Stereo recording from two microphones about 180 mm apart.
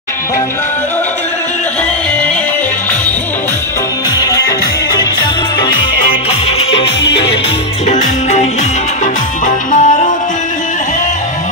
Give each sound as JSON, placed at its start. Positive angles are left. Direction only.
{"t": 4.2, "sound": "music", "side_deg": 20}
{"t": 7.9, "sound": "music", "side_deg": 40}
{"t": 9.7, "sound": "music", "side_deg": 45}